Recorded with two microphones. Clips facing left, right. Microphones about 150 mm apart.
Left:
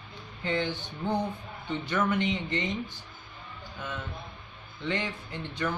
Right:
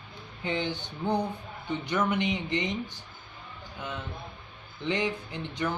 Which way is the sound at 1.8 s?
15° right (ahead or behind).